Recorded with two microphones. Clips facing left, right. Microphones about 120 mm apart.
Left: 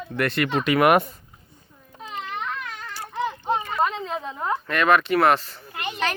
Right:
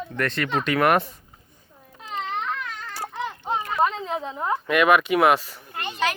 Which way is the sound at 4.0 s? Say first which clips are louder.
Right 1 dB; 20° right (ahead or behind).